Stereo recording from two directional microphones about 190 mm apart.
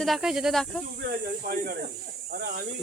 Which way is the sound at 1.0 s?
55° right (ahead or behind).